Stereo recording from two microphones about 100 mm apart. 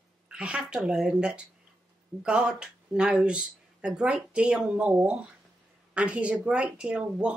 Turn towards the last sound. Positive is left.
turn(degrees=-10)  # may be behind; listen again after turning